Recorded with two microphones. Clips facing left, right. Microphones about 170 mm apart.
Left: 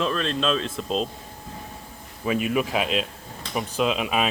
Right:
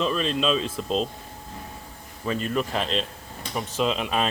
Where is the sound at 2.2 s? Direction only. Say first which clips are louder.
Left 3 dB; 10° left (ahead or behind).